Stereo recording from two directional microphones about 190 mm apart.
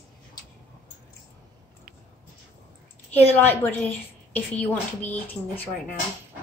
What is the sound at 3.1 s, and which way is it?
Speech, 10° left (ahead or behind).